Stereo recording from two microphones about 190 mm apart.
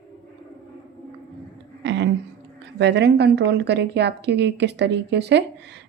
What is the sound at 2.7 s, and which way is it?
A woman's voice, 65° right (ahead or behind).